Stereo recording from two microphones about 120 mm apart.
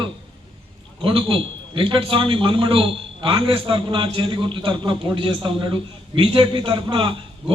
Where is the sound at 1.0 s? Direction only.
45° right (ahead or behind).